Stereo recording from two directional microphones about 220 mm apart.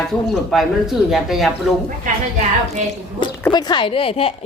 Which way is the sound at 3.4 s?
20° left (ahead or behind).